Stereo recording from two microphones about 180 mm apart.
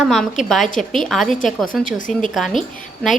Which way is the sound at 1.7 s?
45° left (ahead or behind).